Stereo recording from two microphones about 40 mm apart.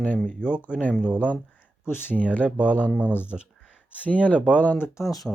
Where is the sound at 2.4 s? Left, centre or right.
Right.